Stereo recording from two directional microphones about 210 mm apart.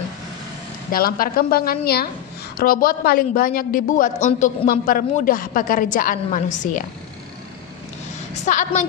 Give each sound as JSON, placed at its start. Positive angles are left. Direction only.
{"t": 0.9, "sound": "a woman's voice", "side_deg": 45}
{"t": 8.5, "sound": "a woman's voice", "side_deg": 35}